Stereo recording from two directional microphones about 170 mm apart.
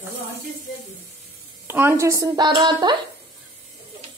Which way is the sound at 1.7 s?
15° right (ahead or behind).